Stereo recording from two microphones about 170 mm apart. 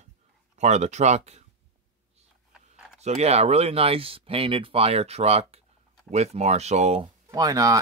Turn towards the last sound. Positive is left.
turn(degrees=-20)  # may be behind; listen again after turning